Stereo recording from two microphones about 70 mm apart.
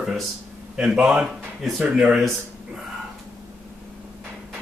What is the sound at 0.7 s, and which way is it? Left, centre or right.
Speech, centre.